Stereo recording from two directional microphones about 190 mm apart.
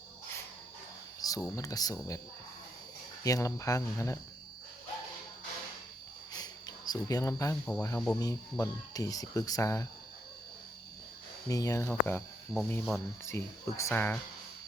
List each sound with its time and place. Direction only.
1.2 s a sound: 20° left (ahead or behind)
1.5 s speech: 20° left (ahead or behind)
3.2 s speech: 15° left (ahead or behind)
6.3 s cricket: 20° left (ahead or behind)
7.8 s speech: 15° left (ahead or behind)
11.4 s speech: 15° left (ahead or behind)